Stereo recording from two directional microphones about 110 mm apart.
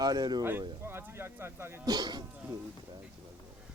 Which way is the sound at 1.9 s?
40° right (ahead or behind).